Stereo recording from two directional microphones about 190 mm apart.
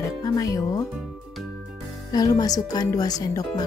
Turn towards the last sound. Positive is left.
turn(degrees=20)  # may be behind; listen again after turning